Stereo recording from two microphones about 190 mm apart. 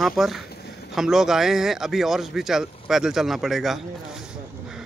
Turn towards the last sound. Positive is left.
turn(degrees=0)  # may be behind; listen again after turning